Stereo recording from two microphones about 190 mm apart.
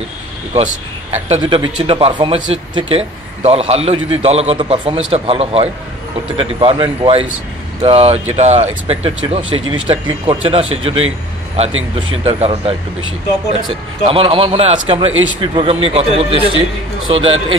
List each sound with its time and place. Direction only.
1.1 s a man's voice: 30° right (ahead or behind)
9.6 s speech: 90° right
9.8 s a man's voice: 25° right (ahead or behind)